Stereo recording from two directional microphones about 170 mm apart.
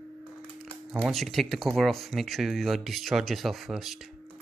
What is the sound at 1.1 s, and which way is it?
Speech, centre (ahead or behind).